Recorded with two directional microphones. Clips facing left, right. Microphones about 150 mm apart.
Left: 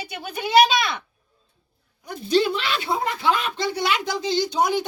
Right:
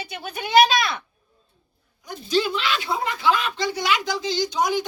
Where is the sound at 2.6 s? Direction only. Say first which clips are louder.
Even; 50° left (ahead or behind).